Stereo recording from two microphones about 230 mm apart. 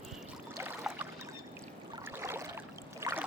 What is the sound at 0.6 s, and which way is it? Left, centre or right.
Boat, centre.